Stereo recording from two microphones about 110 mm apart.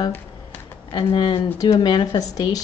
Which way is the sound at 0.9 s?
50° left (ahead or behind).